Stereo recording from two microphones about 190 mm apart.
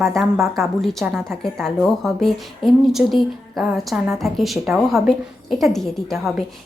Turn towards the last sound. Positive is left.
turn(degrees=0)  # may be behind; listen again after turning